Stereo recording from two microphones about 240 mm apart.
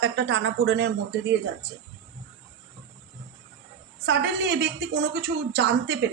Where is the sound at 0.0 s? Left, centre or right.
Right.